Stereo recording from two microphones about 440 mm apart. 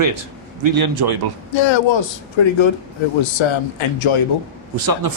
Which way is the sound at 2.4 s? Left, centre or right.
Left.